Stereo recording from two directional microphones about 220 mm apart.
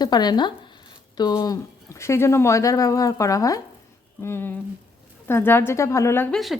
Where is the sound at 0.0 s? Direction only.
20° left (ahead or behind).